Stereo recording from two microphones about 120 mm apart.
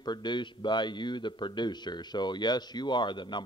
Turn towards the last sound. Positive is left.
turn(degrees=40)  # may be behind; listen again after turning